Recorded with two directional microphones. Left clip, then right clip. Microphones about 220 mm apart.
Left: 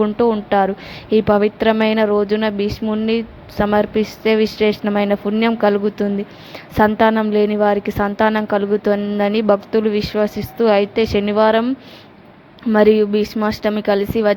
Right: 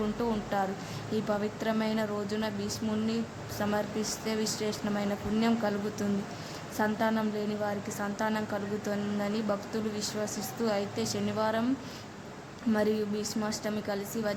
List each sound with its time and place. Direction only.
0.0 s a woman's voice: 30° left (ahead or behind)
12.7 s a woman's voice: 30° left (ahead or behind)